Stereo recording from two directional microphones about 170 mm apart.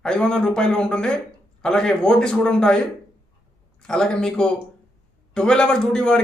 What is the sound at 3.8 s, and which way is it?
A man's voice, 5° left (ahead or behind).